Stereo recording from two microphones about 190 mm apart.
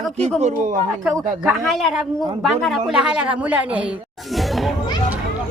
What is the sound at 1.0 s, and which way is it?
A woman's voice, 5° right (ahead or behind).